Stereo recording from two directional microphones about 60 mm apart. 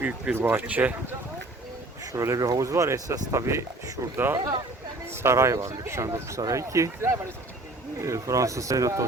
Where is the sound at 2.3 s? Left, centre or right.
Right.